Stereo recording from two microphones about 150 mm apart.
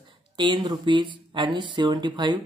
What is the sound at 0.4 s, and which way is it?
Speech, 30° right (ahead or behind).